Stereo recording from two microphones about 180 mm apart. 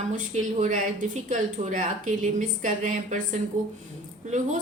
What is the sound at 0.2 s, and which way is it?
A woman's voice, 45° right (ahead or behind).